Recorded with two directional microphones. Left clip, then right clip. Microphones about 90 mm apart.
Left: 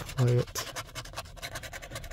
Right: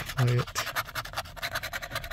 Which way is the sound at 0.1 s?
Centre (ahead or behind).